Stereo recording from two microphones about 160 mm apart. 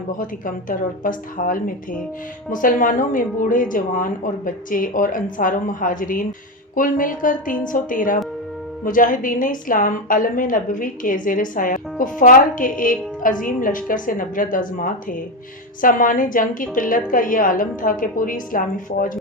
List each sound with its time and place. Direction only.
0.2 s a woman's voice: 60° left (ahead or behind)